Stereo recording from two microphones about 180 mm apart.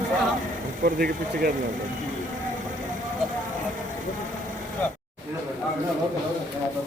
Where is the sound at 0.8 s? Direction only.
55° right (ahead or behind).